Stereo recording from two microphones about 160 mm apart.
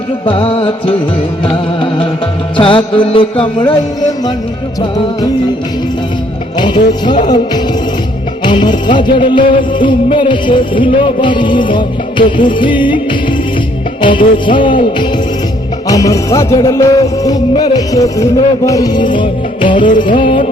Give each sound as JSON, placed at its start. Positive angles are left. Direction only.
{"t": 0.3, "sound": "music", "side_deg": 35}
{"t": 4.8, "sound": "music", "side_deg": 30}
{"t": 6.6, "sound": "music", "side_deg": 30}